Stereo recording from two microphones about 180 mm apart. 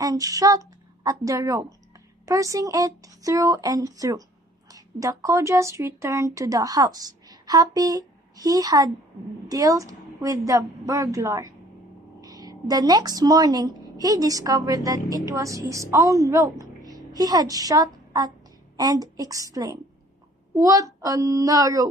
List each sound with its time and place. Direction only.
0.0 s a woman's voice: 20° right (ahead or behind)